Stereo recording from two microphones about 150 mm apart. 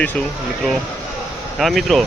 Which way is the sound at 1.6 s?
Centre (ahead or behind).